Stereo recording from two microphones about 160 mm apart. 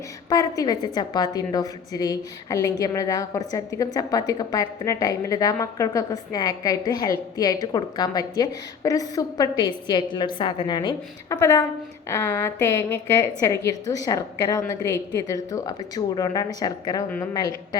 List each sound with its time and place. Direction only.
0.3 s a woman's voice: 20° left (ahead or behind)